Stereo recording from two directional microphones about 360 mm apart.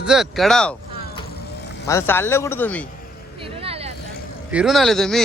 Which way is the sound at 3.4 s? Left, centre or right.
Centre.